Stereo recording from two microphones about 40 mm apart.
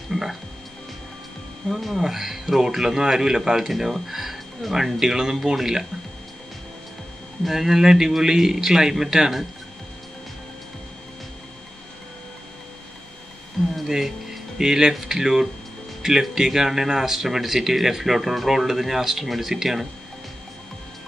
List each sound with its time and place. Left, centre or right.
0.1 s speech: centre
1.8 s speech: centre
7.4 s speech: centre
13.8 s speech: centre